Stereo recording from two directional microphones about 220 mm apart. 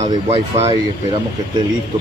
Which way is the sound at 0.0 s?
30° right (ahead or behind).